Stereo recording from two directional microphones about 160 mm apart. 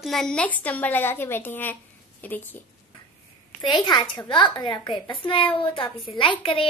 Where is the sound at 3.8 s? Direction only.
30° left (ahead or behind).